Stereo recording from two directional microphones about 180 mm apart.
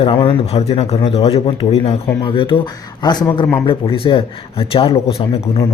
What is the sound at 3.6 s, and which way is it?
A man's voice, 30° left (ahead or behind).